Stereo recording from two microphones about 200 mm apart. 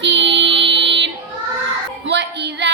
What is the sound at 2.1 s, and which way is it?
Music, 60° right (ahead or behind).